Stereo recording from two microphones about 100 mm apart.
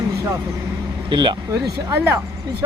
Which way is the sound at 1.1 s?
55° right (ahead or behind).